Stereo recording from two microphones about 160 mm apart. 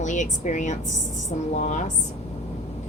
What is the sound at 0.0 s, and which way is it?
A woman's voice, 50° left (ahead or behind).